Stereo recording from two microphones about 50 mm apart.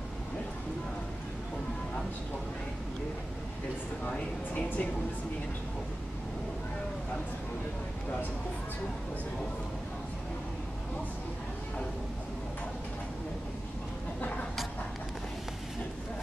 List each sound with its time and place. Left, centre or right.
4.0 s a woman's voice: left